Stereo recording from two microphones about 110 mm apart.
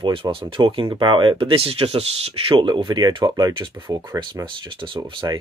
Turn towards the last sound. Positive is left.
turn(degrees=-30)  # may be behind; listen again after turning